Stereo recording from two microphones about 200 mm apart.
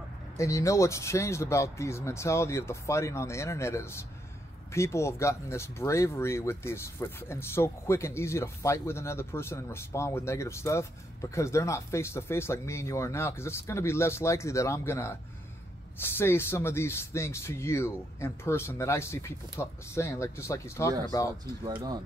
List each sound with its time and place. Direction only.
0.4 s speech: 15° left (ahead or behind)